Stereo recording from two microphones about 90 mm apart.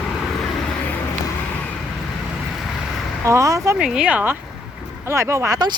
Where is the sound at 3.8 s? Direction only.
10° right (ahead or behind).